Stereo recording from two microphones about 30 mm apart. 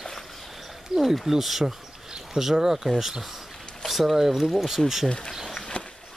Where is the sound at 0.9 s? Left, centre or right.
Centre.